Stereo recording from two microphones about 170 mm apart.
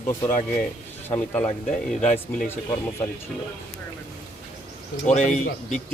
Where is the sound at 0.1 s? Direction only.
15° left (ahead or behind).